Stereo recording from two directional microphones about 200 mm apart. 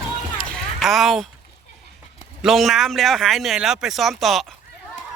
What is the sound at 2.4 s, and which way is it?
Speech, centre (ahead or behind).